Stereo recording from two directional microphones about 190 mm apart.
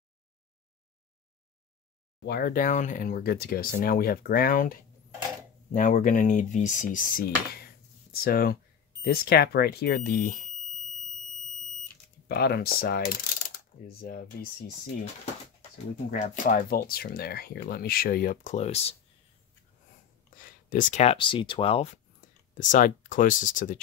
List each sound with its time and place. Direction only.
2.2 s speech: 55° left (ahead or behind)
12.3 s speech: 55° left (ahead or behind)
16.1 s speech: 45° left (ahead or behind)
20.3 s speech: 45° left (ahead or behind)
22.6 s speech: 45° left (ahead or behind)